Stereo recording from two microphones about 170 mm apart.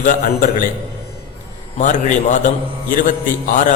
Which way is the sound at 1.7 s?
45° left (ahead or behind).